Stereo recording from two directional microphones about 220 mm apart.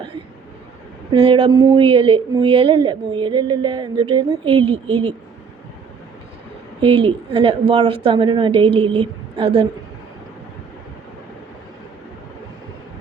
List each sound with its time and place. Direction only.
1.1 s speech: 20° right (ahead or behind)
6.8 s speech: 25° right (ahead or behind)